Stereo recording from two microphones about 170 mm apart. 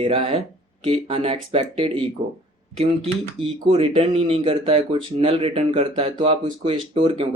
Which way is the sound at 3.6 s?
30° right (ahead or behind).